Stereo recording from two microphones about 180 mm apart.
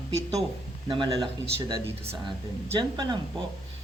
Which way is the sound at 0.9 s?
25° right (ahead or behind).